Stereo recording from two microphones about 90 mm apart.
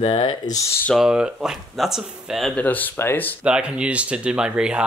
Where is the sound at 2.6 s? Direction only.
20° left (ahead or behind).